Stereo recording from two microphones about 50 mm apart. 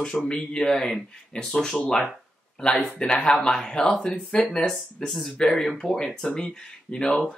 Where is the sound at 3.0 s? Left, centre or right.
Left.